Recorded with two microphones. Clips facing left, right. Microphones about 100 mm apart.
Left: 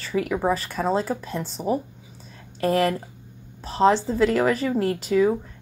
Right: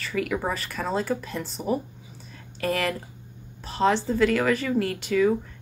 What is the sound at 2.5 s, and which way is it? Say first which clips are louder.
Speech: left 5 dB; 35° left (ahead or behind).